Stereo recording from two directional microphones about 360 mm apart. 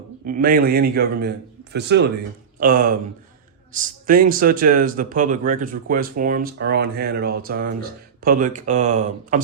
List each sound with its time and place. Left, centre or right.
0.3 s speech: right